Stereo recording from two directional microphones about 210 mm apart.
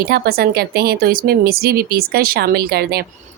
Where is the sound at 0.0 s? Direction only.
45° right (ahead or behind).